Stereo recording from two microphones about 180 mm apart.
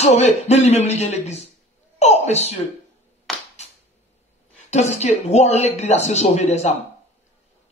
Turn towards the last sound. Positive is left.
turn(degrees=40)  # may be behind; listen again after turning